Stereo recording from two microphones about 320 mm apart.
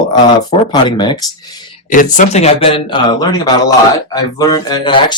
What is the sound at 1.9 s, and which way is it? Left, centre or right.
Speech, left.